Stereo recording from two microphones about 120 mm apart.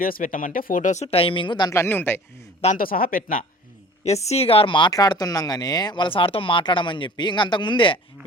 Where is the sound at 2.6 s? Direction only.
65° left (ahead or behind).